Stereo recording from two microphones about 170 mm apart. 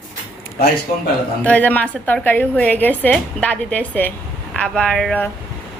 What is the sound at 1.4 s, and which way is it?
A woman's voice, 10° left (ahead or behind).